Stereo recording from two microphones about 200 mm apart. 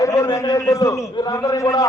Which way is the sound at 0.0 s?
15° left (ahead or behind).